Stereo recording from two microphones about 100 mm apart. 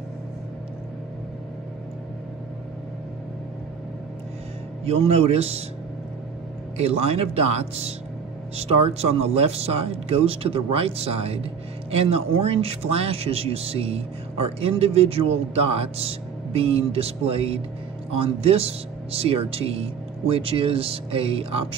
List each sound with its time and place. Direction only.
4.8 s speech: 85° right
6.8 s speech: 90° right; by 21.6 s 75° right (ahead or behind)